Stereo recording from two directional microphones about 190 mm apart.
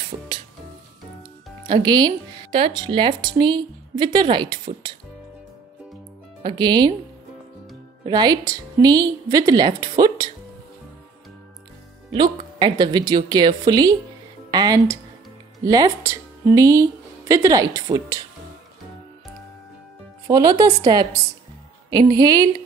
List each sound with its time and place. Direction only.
1.7 s a woman's voice: 25° right (ahead or behind)
6.4 s a woman's voice: 25° right (ahead or behind)
8.0 s a woman's voice: 20° right (ahead or behind)
12.4 s a woman's voice: 25° right (ahead or behind)
20.2 s a woman's voice: 20° right (ahead or behind)